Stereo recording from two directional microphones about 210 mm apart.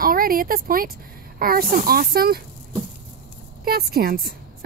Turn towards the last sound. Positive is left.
turn(degrees=-45)  # may be behind; listen again after turning